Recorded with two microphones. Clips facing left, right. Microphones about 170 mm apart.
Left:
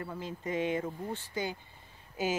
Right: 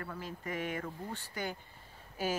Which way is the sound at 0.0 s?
20° left (ahead or behind).